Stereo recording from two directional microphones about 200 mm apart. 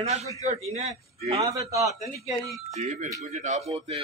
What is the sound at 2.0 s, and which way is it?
Speech, centre (ahead or behind).